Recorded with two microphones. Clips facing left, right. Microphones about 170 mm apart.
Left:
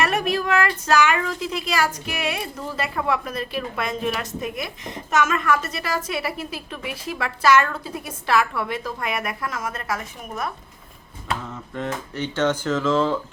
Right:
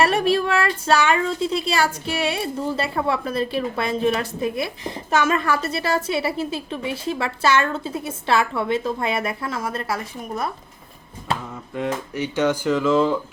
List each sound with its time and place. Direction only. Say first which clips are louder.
0.0 s speech: right 4 dB; 30° right (ahead or behind)
11.7 s speech: right 4 dB; 10° right (ahead or behind)